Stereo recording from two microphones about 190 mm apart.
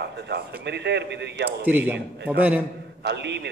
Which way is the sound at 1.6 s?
10° right (ahead or behind).